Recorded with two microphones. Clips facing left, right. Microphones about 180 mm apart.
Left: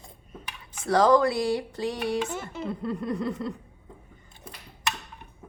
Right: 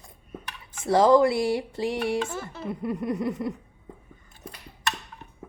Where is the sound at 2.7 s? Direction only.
20° right (ahead or behind).